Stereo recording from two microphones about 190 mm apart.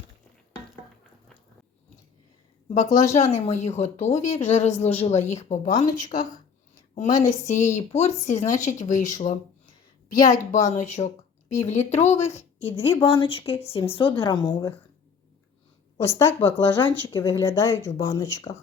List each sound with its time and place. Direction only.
2.6 s a woman's voice: 40° left (ahead or behind)
7.4 s a woman's voice: 40° left (ahead or behind)
12.5 s a woman's voice: 10° left (ahead or behind)
12.9 s speech: 25° left (ahead or behind)
16.0 s speech: 15° left (ahead or behind)